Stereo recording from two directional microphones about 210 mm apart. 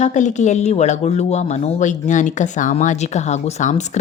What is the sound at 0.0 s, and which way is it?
Speech, 35° left (ahead or behind).